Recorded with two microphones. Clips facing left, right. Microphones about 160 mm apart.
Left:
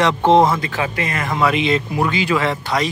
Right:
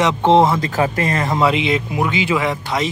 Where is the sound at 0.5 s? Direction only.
40° right (ahead or behind).